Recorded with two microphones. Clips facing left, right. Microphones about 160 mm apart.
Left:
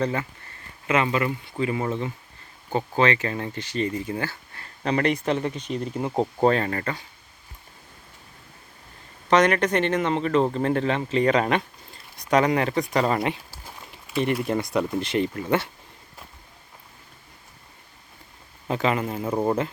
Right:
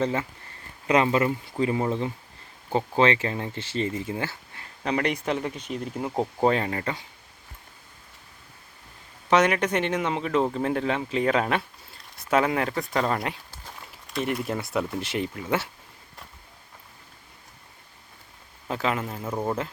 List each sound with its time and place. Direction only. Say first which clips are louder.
0.0 s speech: even; 25° right (ahead or behind)
0.9 s speech: right 2 dB; 35° right (ahead or behind)
3.0 s speech: even; 25° right (ahead or behind)
4.8 s speech: left 3 dB; 10° right (ahead or behind)
6.4 s speech: left 2 dB; 15° right (ahead or behind)
9.3 s speech: left 2 dB; 10° right (ahead or behind)
18.7 s a man's voice: left 4 dB; centre (ahead or behind)
19.3 s speech: left 5 dB; 20° left (ahead or behind)